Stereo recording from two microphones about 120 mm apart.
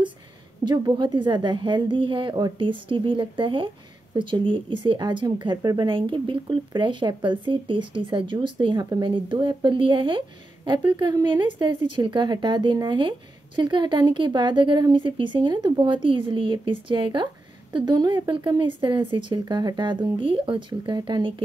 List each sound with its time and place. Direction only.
0.7 s speech: 35° right (ahead or behind)